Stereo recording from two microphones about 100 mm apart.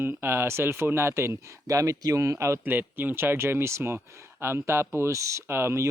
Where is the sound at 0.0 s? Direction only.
20° right (ahead or behind).